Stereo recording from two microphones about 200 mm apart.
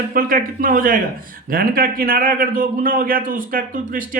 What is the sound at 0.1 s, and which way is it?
Speech, 45° right (ahead or behind).